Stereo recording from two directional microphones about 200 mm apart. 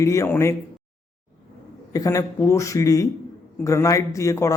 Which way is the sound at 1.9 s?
15° left (ahead or behind).